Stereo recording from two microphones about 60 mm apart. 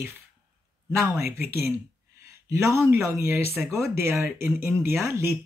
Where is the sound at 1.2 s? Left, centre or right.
Right.